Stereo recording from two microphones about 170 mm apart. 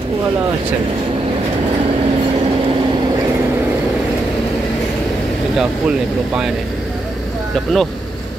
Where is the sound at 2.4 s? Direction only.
30° right (ahead or behind).